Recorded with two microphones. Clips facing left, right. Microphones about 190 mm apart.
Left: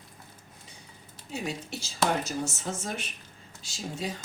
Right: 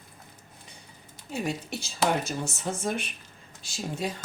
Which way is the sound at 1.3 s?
55° right (ahead or behind).